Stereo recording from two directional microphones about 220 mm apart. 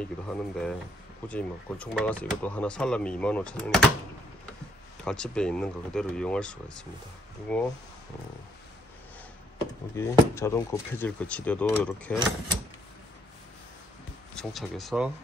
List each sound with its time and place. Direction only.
0.0 s speech: 5° left (ahead or behind)
5.0 s speech: 5° left (ahead or behind)
9.6 s speech: 10° left (ahead or behind)
14.3 s speech: centre (ahead or behind)